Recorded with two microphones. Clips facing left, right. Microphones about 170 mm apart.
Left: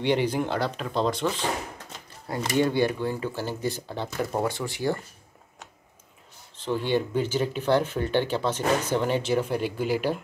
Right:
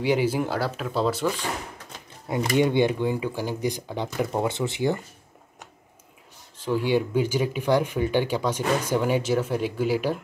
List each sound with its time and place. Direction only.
0.0 s speech: 5° right (ahead or behind)
2.2 s speech: 15° right (ahead or behind)
6.5 s speech: 10° right (ahead or behind)